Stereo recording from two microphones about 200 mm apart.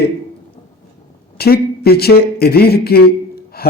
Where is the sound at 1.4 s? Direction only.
50° left (ahead or behind).